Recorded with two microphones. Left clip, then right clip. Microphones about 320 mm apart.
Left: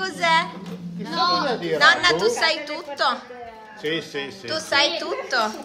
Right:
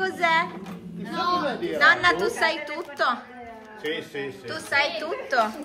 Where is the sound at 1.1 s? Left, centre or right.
Left.